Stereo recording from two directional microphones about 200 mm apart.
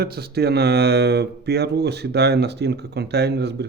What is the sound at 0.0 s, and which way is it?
Speech, 50° right (ahead or behind).